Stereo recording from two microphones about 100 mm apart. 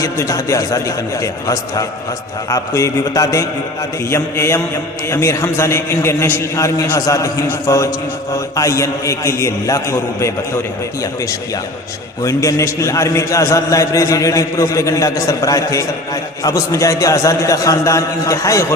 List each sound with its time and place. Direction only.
0.0 s a man's voice: 35° left (ahead or behind)
12.2 s a man's voice: 35° left (ahead or behind)